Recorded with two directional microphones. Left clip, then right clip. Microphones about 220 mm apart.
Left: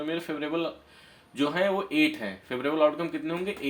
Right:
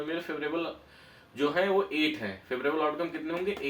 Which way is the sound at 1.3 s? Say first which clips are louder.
Even; 50° left (ahead or behind).